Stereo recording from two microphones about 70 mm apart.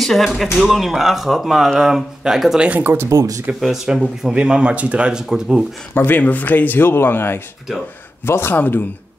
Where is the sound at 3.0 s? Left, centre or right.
Right.